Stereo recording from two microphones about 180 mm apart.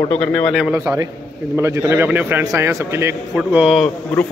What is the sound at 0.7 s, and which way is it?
A man's voice, 15° right (ahead or behind).